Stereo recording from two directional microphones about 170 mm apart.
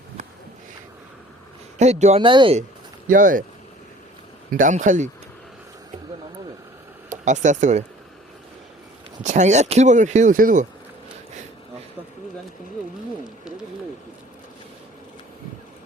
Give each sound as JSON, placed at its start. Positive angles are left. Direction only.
{"t": 1.8, "sound": "speech", "side_deg": -40}
{"t": 3.1, "sound": "speech", "side_deg": -55}
{"t": 4.5, "sound": "speech", "side_deg": -50}
{"t": 7.1, "sound": "speech", "side_deg": -45}
{"t": 9.2, "sound": "speech", "side_deg": -45}